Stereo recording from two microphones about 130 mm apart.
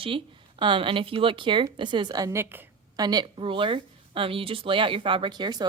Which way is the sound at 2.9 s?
30° right (ahead or behind).